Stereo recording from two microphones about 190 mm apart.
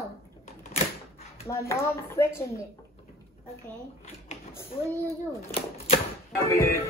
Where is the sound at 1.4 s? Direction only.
15° left (ahead or behind).